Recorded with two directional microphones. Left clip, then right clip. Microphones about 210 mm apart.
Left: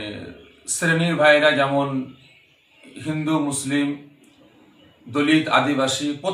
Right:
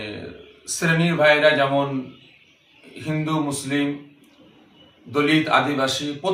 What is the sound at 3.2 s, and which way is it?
Speech, centre (ahead or behind).